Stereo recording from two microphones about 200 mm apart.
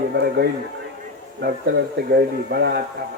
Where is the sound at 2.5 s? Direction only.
50° right (ahead or behind).